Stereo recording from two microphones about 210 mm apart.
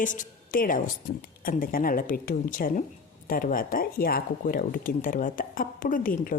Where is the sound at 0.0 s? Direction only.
40° left (ahead or behind).